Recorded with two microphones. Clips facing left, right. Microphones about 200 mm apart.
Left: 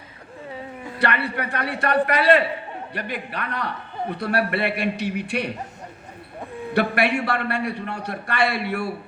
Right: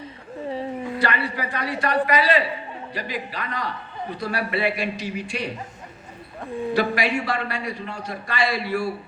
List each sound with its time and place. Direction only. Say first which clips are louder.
0.9 s a man's voice: left 4 dB; 60° left (ahead or behind)
6.7 s a man's voice: left 3 dB; 60° left (ahead or behind)